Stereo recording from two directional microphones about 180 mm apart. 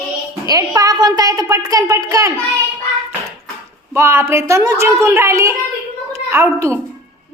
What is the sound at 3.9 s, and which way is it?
A woman's voice, 15° right (ahead or behind).